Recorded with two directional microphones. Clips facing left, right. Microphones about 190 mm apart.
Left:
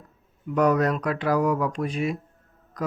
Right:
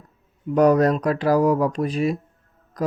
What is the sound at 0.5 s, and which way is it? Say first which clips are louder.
Speech: right 5 dB; 35° right (ahead or behind).